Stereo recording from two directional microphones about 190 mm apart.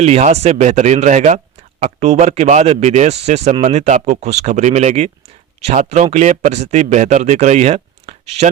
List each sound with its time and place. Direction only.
0.0 s speech: 35° right (ahead or behind)